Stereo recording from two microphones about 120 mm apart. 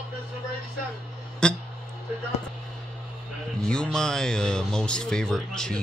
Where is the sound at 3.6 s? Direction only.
5° left (ahead or behind).